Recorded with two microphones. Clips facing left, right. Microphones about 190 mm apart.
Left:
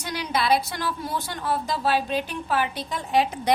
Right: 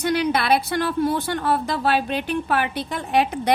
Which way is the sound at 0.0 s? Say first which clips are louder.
Right 6 dB; 60° right (ahead or behind).